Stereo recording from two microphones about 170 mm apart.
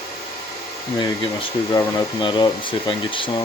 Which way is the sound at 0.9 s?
25° left (ahead or behind).